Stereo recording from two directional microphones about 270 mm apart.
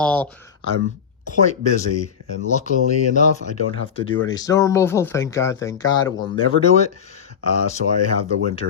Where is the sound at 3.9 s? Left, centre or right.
Centre.